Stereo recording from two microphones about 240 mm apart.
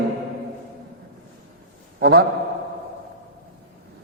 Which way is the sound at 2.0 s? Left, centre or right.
Right.